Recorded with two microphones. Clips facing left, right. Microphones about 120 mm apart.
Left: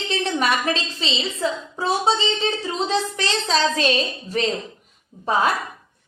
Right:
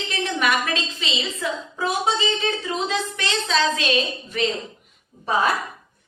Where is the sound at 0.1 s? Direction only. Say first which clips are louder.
Left 1 dB; 30° left (ahead or behind).